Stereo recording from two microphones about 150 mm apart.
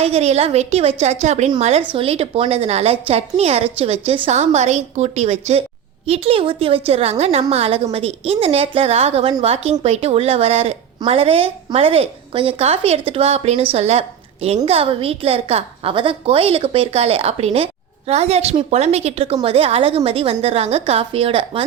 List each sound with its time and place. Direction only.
0.0 s a woman's voice: 45° right (ahead or behind)